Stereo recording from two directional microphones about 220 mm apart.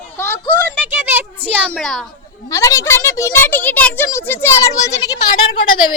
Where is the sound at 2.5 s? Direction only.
15° left (ahead or behind).